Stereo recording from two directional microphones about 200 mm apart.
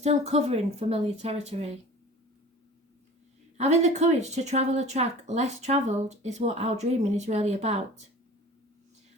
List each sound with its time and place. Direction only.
0.0 s speech: 30° right (ahead or behind)
3.6 s speech: 35° right (ahead or behind)